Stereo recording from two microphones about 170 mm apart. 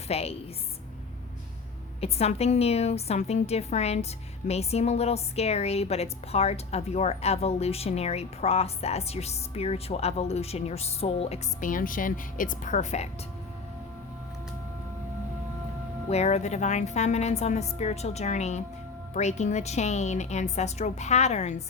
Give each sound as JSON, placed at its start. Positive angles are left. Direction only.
{"t": 0.1, "sound": "a woman's voice", "side_deg": 35}
{"t": 2.0, "sound": "a woman's voice", "side_deg": 40}
{"t": 11.6, "sound": "a woman's voice", "side_deg": 55}
{"t": 16.0, "sound": "a woman's voice", "side_deg": 40}